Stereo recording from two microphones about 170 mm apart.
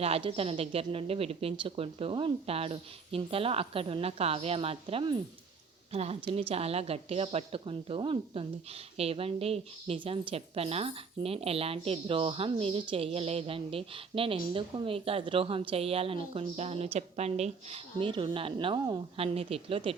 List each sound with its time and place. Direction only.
0.0 s a woman's voice: 35° right (ahead or behind)